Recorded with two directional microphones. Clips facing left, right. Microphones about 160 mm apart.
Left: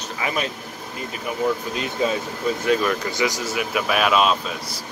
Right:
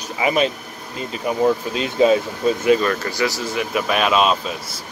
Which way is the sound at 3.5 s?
5° left (ahead or behind).